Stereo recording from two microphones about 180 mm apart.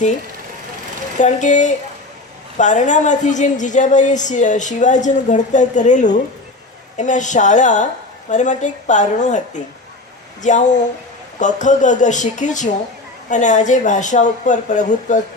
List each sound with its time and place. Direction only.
1.2 s speech: 40° left (ahead or behind)
10.4 s speech: 40° left (ahead or behind)